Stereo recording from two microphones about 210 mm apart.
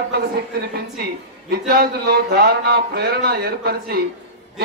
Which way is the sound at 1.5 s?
50° right (ahead or behind).